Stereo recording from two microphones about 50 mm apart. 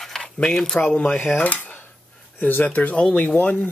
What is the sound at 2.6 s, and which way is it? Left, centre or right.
Speech, left.